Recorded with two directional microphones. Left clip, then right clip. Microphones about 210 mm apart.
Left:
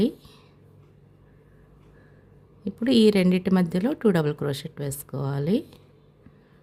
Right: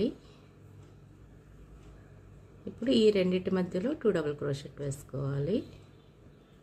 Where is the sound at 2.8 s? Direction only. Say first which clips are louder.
Left 5 dB; 55° left (ahead or behind).